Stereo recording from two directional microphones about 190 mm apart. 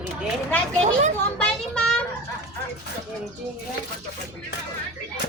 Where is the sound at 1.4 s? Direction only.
5° left (ahead or behind).